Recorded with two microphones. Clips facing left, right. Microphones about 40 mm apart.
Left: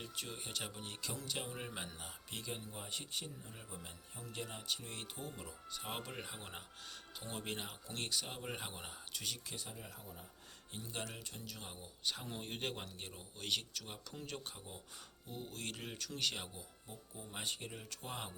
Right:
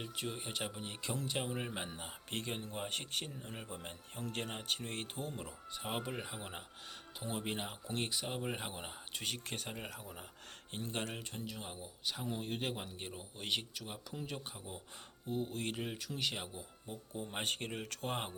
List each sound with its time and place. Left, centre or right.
0.0 s speech: right
1.0 s speech: right
2.3 s speech: right
4.2 s speech: right; by 6.6 s centre
7.2 s speech: right
9.1 s speech: right
10.7 s speech: right
11.6 s speech: centre
12.8 s speech: centre
13.8 s speech: centre
15.3 s speech: right
16.9 s speech: right